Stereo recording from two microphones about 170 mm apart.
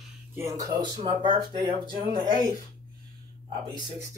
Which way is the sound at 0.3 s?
20° right (ahead or behind).